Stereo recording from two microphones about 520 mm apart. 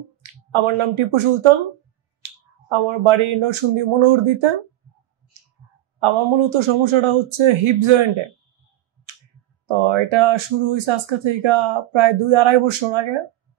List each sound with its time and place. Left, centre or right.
0.5 s speech: right
2.7 s speech: right
5.9 s speech: right
9.7 s speech: right